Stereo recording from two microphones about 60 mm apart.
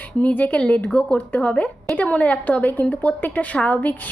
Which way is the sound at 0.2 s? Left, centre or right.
Left.